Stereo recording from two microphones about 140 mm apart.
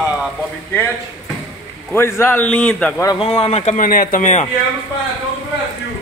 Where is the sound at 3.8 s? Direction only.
85° left; by 4.5 s 60° left (ahead or behind).